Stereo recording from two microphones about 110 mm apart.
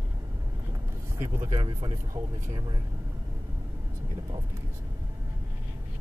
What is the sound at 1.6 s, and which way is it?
Speech, 40° right (ahead or behind).